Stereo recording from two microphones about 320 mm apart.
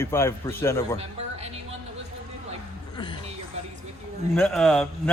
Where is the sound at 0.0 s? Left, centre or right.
Centre.